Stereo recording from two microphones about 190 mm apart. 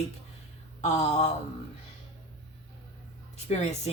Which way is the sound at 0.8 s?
35° left (ahead or behind).